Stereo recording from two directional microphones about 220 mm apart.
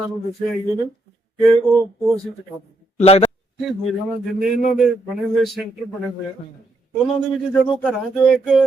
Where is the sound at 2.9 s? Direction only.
30° left (ahead or behind).